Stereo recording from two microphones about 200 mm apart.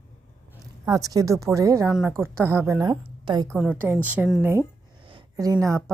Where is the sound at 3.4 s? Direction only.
Centre (ahead or behind).